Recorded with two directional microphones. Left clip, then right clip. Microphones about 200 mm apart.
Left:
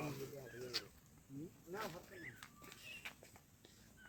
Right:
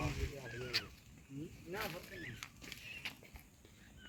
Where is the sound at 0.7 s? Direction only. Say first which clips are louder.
Right 7 dB; 30° left (ahead or behind).